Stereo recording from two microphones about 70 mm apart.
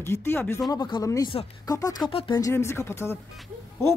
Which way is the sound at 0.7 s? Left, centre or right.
Left.